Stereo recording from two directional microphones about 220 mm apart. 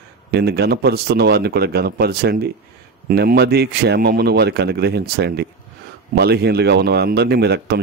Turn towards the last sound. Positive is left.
turn(degrees=-45)  # may be behind; listen again after turning